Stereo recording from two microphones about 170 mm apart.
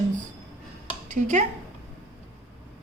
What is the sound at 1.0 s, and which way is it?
Speech, 45° right (ahead or behind).